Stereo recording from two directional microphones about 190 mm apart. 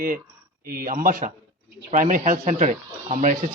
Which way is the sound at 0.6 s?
50° right (ahead or behind).